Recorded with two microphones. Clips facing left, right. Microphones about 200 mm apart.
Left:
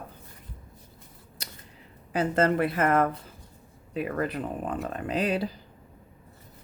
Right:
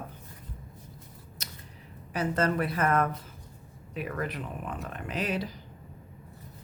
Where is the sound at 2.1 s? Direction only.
30° left (ahead or behind).